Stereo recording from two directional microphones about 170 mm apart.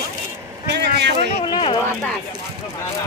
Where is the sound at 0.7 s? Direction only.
85° right.